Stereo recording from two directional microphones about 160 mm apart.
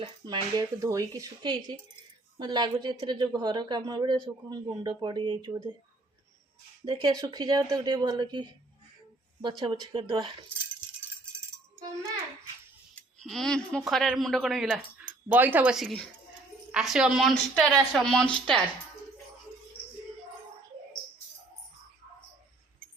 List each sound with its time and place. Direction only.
0.0 s a man's voice: 25° right (ahead or behind)
6.8 s a man's voice: 25° right (ahead or behind)
13.0 s speech: centre (ahead or behind)
15.3 s speech: 10° right (ahead or behind)